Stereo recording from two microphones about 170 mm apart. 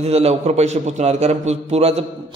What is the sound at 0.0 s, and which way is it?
A man's voice, 40° right (ahead or behind).